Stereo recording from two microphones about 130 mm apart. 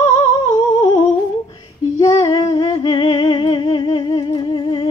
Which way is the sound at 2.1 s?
35° left (ahead or behind).